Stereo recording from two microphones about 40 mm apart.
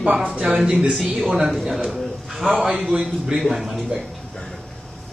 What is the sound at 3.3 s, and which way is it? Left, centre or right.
Speech, centre.